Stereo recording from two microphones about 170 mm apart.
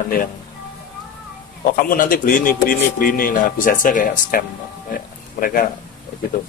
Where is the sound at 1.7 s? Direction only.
55° left (ahead or behind).